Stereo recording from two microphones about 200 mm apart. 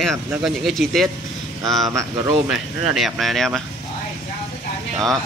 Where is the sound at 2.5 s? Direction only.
Centre (ahead or behind).